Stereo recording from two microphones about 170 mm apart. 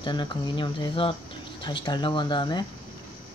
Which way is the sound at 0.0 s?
25° left (ahead or behind).